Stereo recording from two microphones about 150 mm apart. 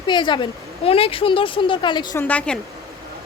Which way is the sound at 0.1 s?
30° left (ahead or behind).